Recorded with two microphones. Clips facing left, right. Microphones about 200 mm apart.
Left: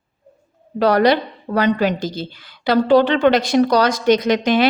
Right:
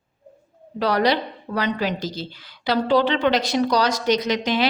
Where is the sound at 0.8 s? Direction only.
50° left (ahead or behind).